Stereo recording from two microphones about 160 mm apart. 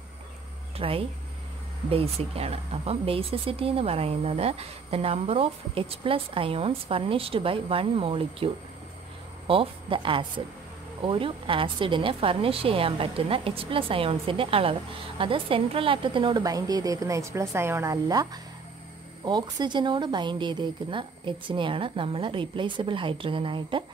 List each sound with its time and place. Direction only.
0.7 s a woman's voice: 35° right (ahead or behind)
9.5 s a woman's voice: 35° right (ahead or behind)